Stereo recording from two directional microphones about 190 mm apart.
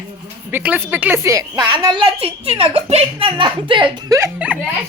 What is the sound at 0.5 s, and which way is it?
A woman's voice, 10° right (ahead or behind).